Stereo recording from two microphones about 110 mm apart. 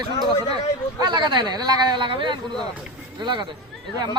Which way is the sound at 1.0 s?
40° right (ahead or behind).